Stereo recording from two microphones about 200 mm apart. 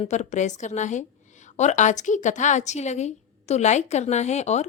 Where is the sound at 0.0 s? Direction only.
35° left (ahead or behind).